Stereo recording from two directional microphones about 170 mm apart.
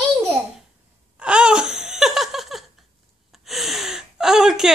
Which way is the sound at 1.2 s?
5° right (ahead or behind).